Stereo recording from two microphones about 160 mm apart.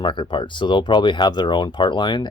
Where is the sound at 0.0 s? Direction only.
30° left (ahead or behind).